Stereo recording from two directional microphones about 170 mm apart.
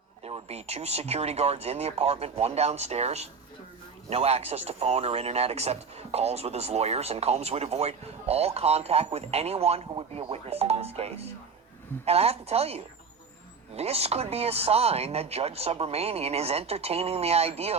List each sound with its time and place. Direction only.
0.3 s speech: 35° right (ahead or behind)